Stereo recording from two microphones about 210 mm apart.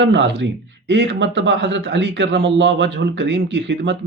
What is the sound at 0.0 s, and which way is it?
Speech, 60° right (ahead or behind).